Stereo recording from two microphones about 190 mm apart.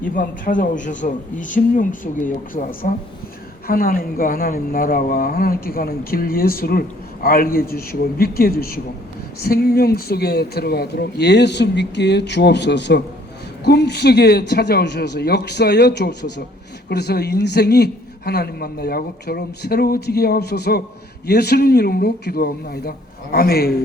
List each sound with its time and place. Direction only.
0.0 s speech: 45° left (ahead or behind)